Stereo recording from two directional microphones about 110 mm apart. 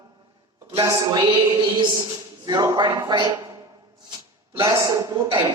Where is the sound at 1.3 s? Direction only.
45° right (ahead or behind).